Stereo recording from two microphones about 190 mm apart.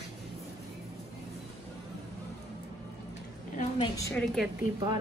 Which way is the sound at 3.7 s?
15° left (ahead or behind).